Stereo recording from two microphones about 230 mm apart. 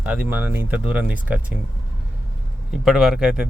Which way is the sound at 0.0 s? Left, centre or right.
Centre.